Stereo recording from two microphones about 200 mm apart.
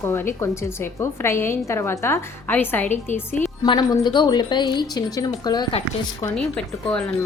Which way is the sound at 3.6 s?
20° left (ahead or behind).